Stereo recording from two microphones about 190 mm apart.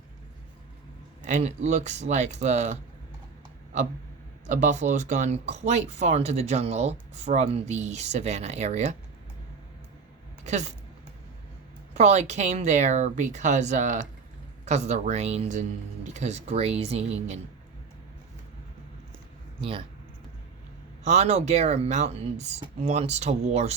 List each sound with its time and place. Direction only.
1.2 s speech: 40° right (ahead or behind)
4.4 s speech: 40° right (ahead or behind)
10.4 s speech: 35° right (ahead or behind)
11.9 s speech: 35° right (ahead or behind)
21.0 s speech: 35° right (ahead or behind)